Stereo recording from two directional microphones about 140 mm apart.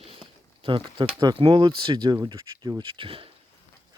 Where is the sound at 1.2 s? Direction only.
30° right (ahead or behind).